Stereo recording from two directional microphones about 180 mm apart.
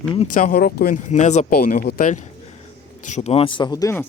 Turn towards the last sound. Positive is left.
turn(degrees=20)  # may be behind; listen again after turning